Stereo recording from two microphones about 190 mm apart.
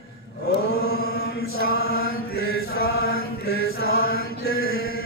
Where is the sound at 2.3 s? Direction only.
55° left (ahead or behind).